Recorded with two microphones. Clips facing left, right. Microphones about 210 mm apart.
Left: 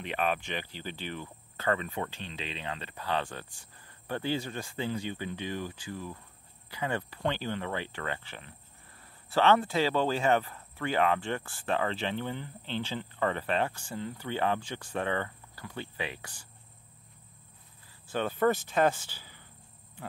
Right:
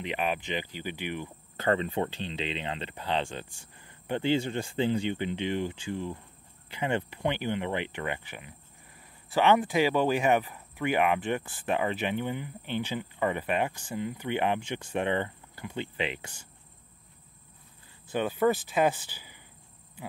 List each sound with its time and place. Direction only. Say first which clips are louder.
0.0 s speech: even; 15° right (ahead or behind)
1.6 s speech: right 4 dB; 30° right (ahead or behind)
18.1 s speech: right 2 dB; 10° right (ahead or behind)